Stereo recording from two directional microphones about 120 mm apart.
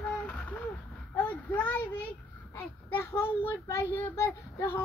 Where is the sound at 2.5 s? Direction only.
20° left (ahead or behind).